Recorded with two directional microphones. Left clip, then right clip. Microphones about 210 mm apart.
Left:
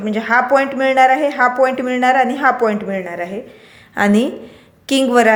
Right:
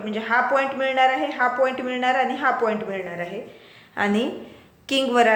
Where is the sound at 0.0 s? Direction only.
50° left (ahead or behind).